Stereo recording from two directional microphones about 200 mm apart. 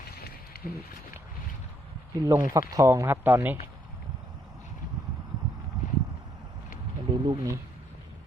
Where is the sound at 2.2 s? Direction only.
20° right (ahead or behind).